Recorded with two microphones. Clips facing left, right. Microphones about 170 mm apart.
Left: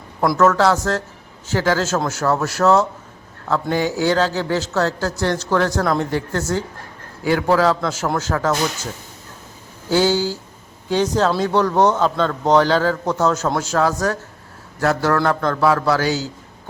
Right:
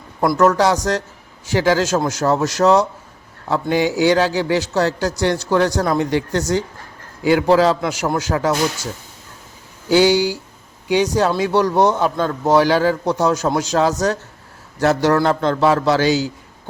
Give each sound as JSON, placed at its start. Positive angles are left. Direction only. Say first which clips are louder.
{"t": 0.3, "sound": "a man's voice", "louder": "even", "side_deg": -15}
{"t": 10.0, "sound": "a man's voice", "louder": "right 3 dB", "side_deg": -15}